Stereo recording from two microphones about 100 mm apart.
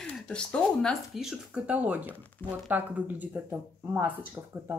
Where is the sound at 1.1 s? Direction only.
5° right (ahead or behind).